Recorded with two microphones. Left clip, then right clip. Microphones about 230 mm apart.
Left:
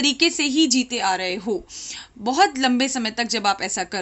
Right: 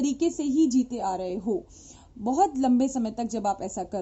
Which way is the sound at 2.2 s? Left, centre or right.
Left.